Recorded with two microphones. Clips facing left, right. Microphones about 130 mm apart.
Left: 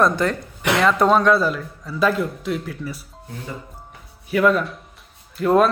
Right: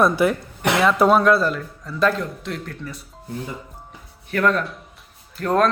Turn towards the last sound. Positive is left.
turn(degrees=5)  # may be behind; listen again after turning